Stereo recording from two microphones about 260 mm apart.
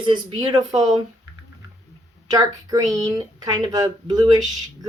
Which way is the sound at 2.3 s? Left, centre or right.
Centre.